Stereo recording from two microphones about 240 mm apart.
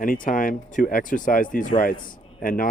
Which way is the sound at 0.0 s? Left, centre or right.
Left.